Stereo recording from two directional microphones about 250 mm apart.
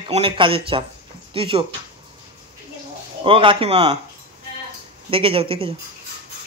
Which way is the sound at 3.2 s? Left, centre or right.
Right.